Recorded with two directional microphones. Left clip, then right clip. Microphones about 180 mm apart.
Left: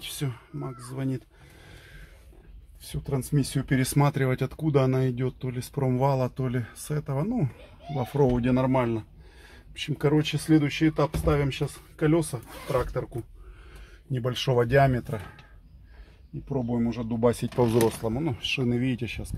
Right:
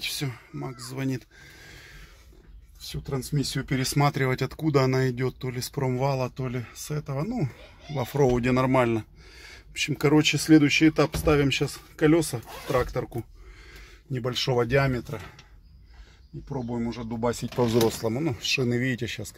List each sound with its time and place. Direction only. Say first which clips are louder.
0.0 s speech: right 4 dB; centre (ahead or behind)
3.3 s speech: left 1 dB; 15° left (ahead or behind)
4.1 s speech: right 1 dB; centre (ahead or behind)
5.9 s speech: left 2 dB; 10° left (ahead or behind)
7.9 s speech: right 1 dB; 5° right (ahead or behind)
8.4 s a sound: right 2 dB; 10° right (ahead or behind)
9.8 s speech: right 4 dB; 20° right (ahead or behind)
14.1 s speech: even; 10° left (ahead or behind)
16.4 s speech: left 3 dB; 5° left (ahead or behind)
18.1 s speech: right 2 dB; 5° right (ahead or behind)